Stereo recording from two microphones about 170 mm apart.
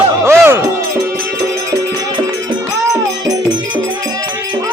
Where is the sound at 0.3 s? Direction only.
15° right (ahead or behind).